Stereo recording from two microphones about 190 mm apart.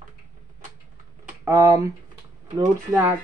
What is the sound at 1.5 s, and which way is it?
Speech, 15° right (ahead or behind).